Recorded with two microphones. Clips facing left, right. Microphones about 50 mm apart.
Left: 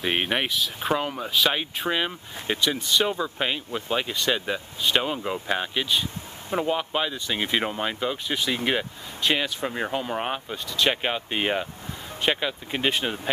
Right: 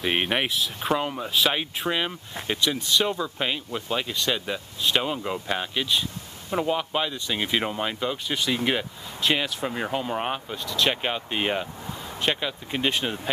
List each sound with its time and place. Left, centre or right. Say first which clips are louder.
0.0 s speech: even; centre